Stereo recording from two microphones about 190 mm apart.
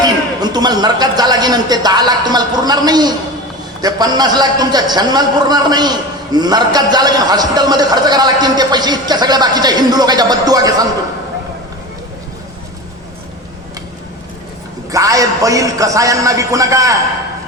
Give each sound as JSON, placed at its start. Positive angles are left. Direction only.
{"t": 0.0, "sound": "a man's voice", "side_deg": -20}
{"t": 14.9, "sound": "a man's voice", "side_deg": -20}